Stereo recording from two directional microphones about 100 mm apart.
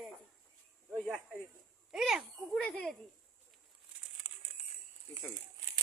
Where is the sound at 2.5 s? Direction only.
10° left (ahead or behind).